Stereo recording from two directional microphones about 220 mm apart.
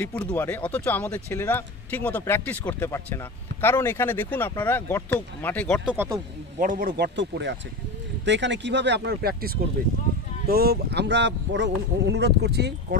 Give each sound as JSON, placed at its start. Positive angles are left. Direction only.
{"t": 0.0, "sound": "speech", "side_deg": 5}
{"t": 5.9, "sound": "speech", "side_deg": -15}
{"t": 6.6, "sound": "speech", "side_deg": -40}
{"t": 7.2, "sound": "speech", "side_deg": -55}